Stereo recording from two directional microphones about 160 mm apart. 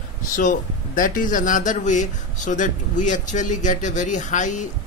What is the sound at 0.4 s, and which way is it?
Speech, 55° left (ahead or behind).